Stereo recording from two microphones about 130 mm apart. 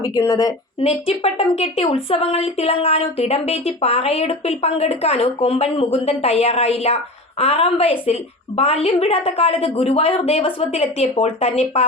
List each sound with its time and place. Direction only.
0.2 s a woman's voice: 30° left (ahead or behind)
0.8 s speech: 50° left (ahead or behind)